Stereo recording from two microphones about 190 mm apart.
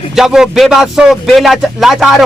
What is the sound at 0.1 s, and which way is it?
A man's voice, centre (ahead or behind).